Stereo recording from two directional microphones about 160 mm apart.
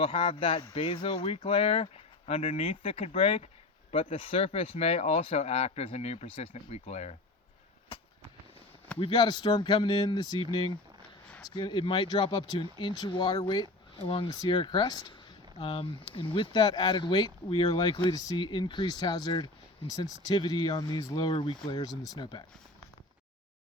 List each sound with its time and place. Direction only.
0.0 s speech: 35° left (ahead or behind)
9.0 s speech: 30° left (ahead or behind)
14.0 s speech: 35° left (ahead or behind)